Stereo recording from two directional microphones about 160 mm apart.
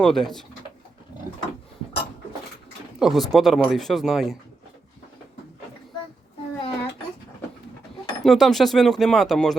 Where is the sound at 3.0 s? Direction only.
Centre (ahead or behind).